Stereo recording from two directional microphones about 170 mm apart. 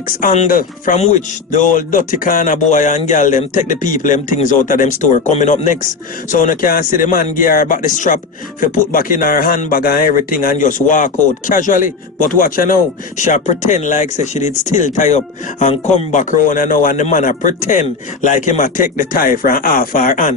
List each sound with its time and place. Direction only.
0.2 s speech: 50° left (ahead or behind)